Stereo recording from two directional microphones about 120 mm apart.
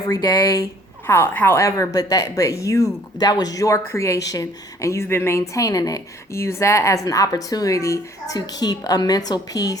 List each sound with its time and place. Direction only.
0.2 s speech: 40° left (ahead or behind)
0.5 s a woman's voice: 20° left (ahead or behind)